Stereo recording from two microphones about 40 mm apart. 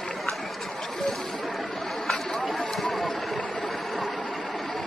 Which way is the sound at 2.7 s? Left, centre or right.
Centre.